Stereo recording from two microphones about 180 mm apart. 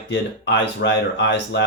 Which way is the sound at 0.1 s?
80° left.